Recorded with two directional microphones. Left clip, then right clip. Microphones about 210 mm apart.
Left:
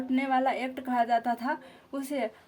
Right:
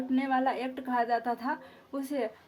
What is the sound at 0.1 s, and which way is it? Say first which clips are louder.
A woman's voice: left 2 dB; 45° left (ahead or behind).